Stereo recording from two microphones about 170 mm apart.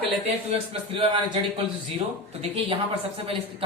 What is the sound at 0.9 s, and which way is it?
A woman's voice, 35° right (ahead or behind).